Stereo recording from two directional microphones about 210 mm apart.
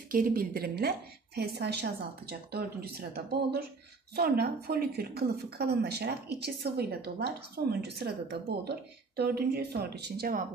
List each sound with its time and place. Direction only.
0.1 s a woman's voice: 40° right (ahead or behind)